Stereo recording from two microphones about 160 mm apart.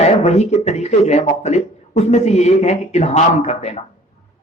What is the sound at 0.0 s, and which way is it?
A man's voice, 45° left (ahead or behind).